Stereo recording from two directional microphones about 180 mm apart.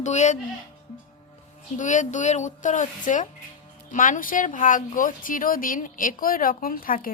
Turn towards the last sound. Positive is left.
turn(degrees=50)  # may be behind; listen again after turning